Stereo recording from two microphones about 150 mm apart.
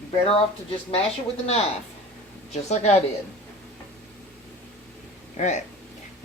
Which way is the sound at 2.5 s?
50° left (ahead or behind).